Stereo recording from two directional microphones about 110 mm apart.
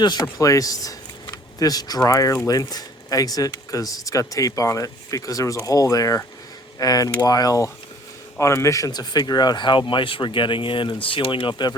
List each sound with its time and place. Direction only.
0.0 s speech: 40° left (ahead or behind)